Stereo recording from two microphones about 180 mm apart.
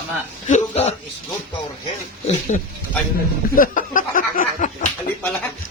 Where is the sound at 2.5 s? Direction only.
45° left (ahead or behind).